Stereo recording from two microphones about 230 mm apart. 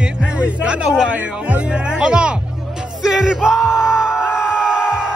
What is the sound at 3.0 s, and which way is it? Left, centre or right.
Yell, centre.